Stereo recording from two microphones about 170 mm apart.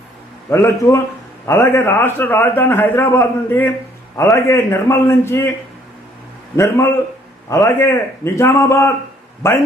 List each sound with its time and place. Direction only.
0.5 s a man's voice: 15° left (ahead or behind)
6.6 s a man's voice: 15° left (ahead or behind)